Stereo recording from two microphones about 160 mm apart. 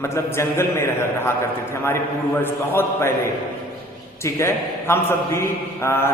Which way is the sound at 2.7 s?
15° left (ahead or behind).